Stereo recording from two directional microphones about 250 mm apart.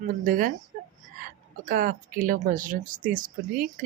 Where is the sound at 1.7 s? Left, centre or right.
Right.